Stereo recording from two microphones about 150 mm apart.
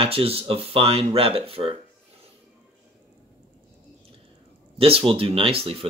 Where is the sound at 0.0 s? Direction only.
40° right (ahead or behind).